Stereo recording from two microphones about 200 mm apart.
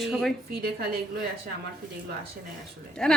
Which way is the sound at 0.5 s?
50° right (ahead or behind).